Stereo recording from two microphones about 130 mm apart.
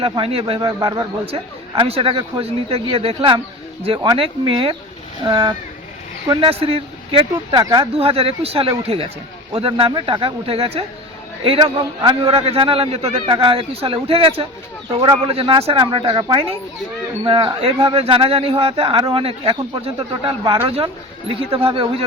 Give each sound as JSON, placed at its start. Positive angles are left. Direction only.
{"t": 0.0, "sound": "speech", "side_deg": -45}
{"t": 0.6, "sound": "a man's voice", "side_deg": -30}
{"t": 1.3, "sound": "a man's voice", "side_deg": -45}
{"t": 6.4, "sound": "speech", "side_deg": -45}
{"t": 7.5, "sound": "a man's voice", "side_deg": -35}
{"t": 7.9, "sound": "a man's voice", "side_deg": -50}
{"t": 12.3, "sound": "speech", "side_deg": -50}